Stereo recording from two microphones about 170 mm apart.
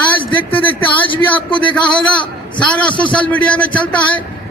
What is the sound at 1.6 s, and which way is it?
A man's voice, 5° left (ahead or behind).